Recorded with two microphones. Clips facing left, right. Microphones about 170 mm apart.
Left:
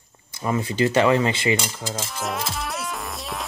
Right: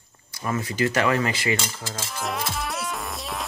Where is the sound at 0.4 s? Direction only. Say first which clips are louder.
Left 3 dB; 25° left (ahead or behind).